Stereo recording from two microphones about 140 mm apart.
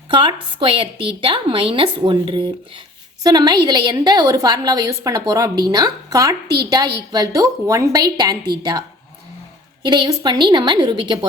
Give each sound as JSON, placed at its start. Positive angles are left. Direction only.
{"t": 0.1, "sound": "a woman's voice", "side_deg": -35}
{"t": 9.8, "sound": "a woman's voice", "side_deg": -30}